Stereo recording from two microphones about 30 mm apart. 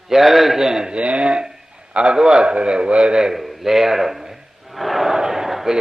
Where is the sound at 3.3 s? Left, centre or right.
Centre.